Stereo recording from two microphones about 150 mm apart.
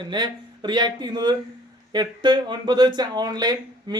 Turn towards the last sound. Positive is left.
turn(degrees=-30)  # may be behind; listen again after turning